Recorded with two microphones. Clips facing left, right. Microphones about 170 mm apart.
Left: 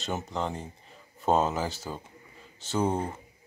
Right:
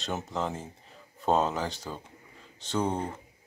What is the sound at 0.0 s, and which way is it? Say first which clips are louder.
Speech: even; centre (ahead or behind).